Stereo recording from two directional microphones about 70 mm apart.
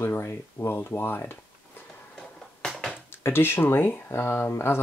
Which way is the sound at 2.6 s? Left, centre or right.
Centre.